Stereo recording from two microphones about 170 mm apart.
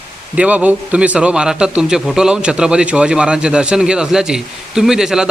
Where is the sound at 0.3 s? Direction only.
10° right (ahead or behind).